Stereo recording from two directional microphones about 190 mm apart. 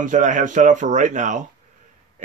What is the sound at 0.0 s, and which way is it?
Speech, 40° right (ahead or behind).